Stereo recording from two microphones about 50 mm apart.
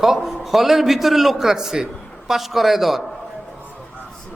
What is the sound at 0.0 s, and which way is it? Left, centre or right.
A man's voice, centre.